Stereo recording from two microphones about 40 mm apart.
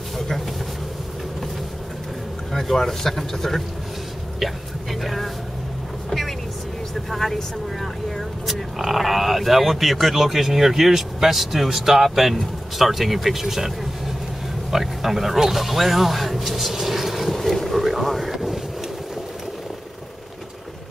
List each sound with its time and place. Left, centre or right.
2.5 s speech: centre
5.0 s speech: centre
6.0 s vehicle: centre
7.1 s speech: centre
18.3 s wind noise: centre